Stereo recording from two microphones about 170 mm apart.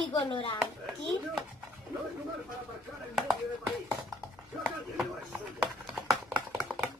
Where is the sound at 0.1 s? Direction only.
30° left (ahead or behind).